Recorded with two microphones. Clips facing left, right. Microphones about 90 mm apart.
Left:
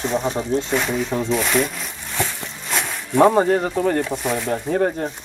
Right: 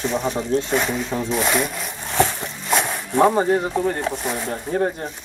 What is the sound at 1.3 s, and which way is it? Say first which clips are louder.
Speech: even; 15° right (ahead or behind).